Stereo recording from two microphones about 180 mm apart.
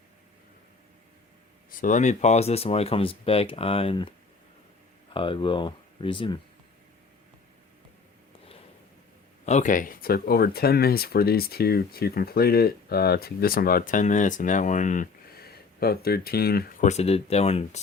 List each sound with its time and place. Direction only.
1.8 s speech: 45° left (ahead or behind)
5.1 s speech: 30° left (ahead or behind)
9.5 s speech: 45° left (ahead or behind)
15.8 s speech: 60° left (ahead or behind); by 17.7 s 35° left (ahead or behind)